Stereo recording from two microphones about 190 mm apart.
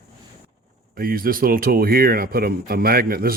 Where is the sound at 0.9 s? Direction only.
50° right (ahead or behind).